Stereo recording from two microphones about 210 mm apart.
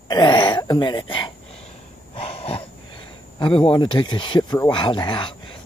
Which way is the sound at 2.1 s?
25° left (ahead or behind).